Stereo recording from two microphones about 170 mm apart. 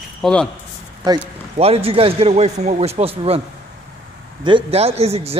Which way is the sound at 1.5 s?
35° right (ahead or behind).